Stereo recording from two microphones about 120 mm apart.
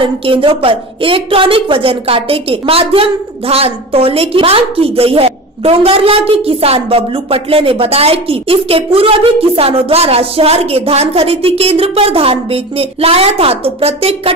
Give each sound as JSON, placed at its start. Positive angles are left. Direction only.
{"t": 0.0, "sound": "a woman's voice", "side_deg": -45}